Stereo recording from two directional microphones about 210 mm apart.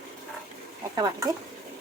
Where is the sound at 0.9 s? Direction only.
15° right (ahead or behind).